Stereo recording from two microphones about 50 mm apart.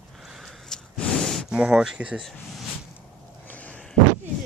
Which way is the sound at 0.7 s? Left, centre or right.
Centre.